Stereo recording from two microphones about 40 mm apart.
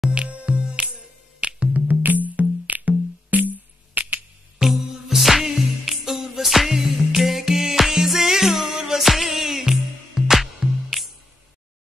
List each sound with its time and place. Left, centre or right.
0.1 s music: right
1.9 s music: right
4.6 s music: centre